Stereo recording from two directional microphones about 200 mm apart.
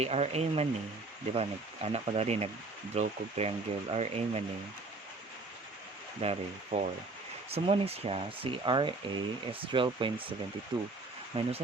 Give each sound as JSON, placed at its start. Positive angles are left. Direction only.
{"t": 0.0, "sound": "speech", "side_deg": -30}
{"t": 6.2, "sound": "speech", "side_deg": -40}